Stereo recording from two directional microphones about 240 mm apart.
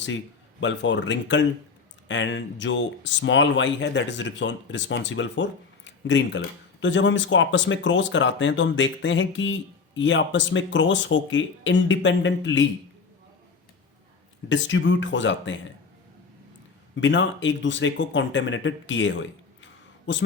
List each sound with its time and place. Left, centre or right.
0.6 s speech: left
14.5 s speech: left
16.9 s speech: left